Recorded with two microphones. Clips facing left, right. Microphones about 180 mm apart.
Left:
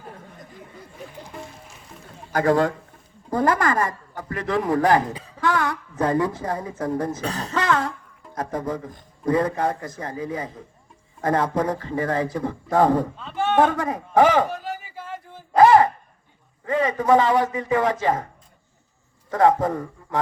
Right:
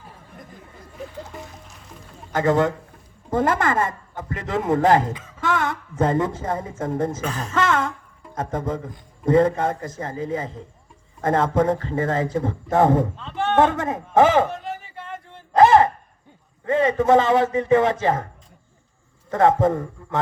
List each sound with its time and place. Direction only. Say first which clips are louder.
1.4 s music: even; centre (ahead or behind)
2.3 s speech: even; 20° right (ahead or behind)
5.1 s speech: even; 35° left (ahead or behind)
5.4 s a woman's voice: left 1 dB; 25° right (ahead or behind)
7.2 s speech: even; 35° left (ahead or behind)
8.4 s speech: right 1 dB; 25° right (ahead or behind)
13.1 s speech: even; 5° left (ahead or behind)
13.6 s speech: right 1 dB; 25° right (ahead or behind)
14.5 s a sound: even; 5° left (ahead or behind)
15.5 s a sound: even; 25° right (ahead or behind)
16.6 s speech: right 2 dB; 25° right (ahead or behind)
19.3 s speech: right 1 dB; 25° right (ahead or behind)